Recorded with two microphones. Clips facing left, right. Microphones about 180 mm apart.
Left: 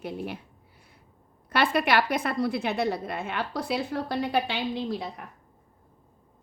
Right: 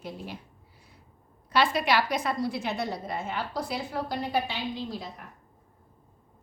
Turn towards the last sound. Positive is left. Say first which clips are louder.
# left 4 dB
turn(degrees=65)  # may be behind; listen again after turning